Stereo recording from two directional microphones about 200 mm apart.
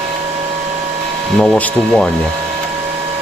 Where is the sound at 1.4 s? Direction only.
5° left (ahead or behind).